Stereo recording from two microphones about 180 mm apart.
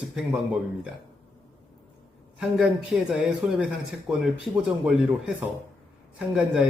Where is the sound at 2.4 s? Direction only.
5° right (ahead or behind).